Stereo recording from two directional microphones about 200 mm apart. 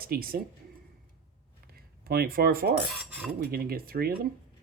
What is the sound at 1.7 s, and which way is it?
Speech, 50° right (ahead or behind).